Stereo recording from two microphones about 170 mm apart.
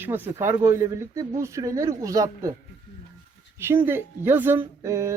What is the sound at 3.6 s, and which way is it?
Speech, 15° right (ahead or behind).